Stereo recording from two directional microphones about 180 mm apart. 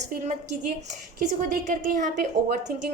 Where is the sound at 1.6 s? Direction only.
50° right (ahead or behind).